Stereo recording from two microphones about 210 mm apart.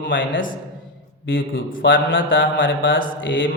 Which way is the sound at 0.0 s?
60° left (ahead or behind).